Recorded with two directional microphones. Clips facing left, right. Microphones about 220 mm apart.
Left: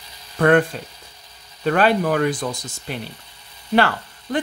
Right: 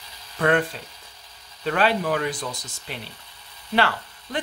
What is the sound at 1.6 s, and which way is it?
Speech, 50° left (ahead or behind).